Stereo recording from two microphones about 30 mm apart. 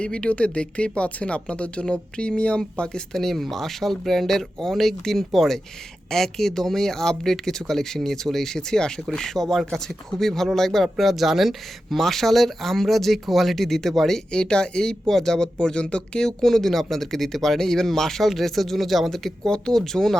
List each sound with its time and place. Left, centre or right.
0.0 s speech: left
3.1 s speech: centre
4.3 s speech: centre
10.9 s speech: centre
11.9 s speech: centre
14.3 s speech: left
15.6 s speech: left
16.4 s speech: centre
19.5 s speech: centre